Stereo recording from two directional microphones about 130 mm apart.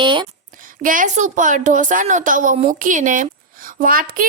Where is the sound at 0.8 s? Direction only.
90° right.